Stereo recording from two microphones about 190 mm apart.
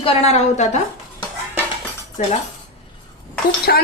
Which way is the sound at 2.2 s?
40° left (ahead or behind).